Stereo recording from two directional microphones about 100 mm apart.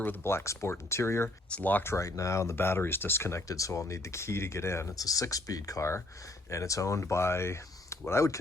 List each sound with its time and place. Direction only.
0.0 s speech: 20° left (ahead or behind)
1.5 s speech: 15° left (ahead or behind)